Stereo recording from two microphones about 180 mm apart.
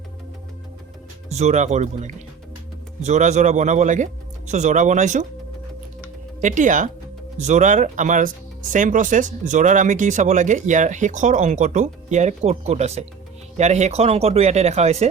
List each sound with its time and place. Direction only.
1.3 s speech: 40° right (ahead or behind)
6.4 s speech: 45° right (ahead or behind)